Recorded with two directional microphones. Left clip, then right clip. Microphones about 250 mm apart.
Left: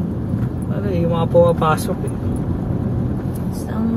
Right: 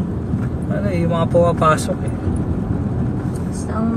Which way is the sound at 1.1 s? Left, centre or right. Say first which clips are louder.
Left 2 dB; centre.